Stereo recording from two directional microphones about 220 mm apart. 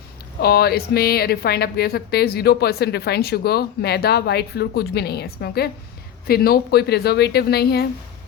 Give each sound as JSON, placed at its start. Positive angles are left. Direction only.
{"t": 0.3, "sound": "speech", "side_deg": 45}